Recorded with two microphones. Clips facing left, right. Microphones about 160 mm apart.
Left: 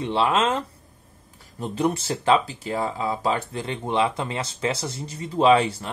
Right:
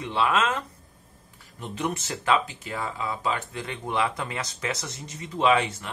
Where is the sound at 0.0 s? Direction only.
30° left (ahead or behind).